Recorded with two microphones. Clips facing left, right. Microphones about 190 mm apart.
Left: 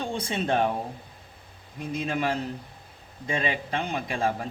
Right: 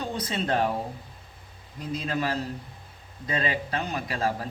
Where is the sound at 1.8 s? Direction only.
25° left (ahead or behind).